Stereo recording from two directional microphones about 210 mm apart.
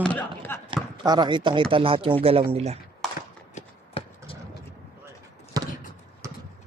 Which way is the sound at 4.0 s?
25° left (ahead or behind).